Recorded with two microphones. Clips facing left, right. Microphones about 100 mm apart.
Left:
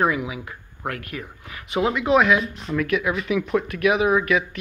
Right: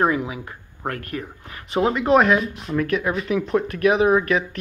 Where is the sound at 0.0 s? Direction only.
35° right (ahead or behind).